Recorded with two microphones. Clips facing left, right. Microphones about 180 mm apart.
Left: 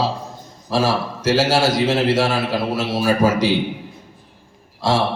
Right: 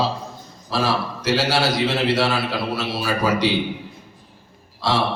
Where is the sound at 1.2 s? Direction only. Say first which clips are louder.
Left 4 dB; 45° left (ahead or behind).